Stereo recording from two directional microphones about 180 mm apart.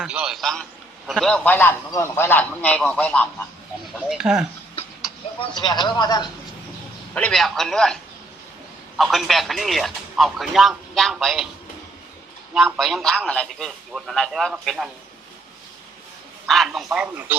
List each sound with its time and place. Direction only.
0.0 s a man's voice: 5° right (ahead or behind)
5.5 s speech: 25° left (ahead or behind)
7.1 s speech: 5° left (ahead or behind)
9.0 s speech: centre (ahead or behind)
12.5 s speech: centre (ahead or behind)
16.5 s speech: centre (ahead or behind)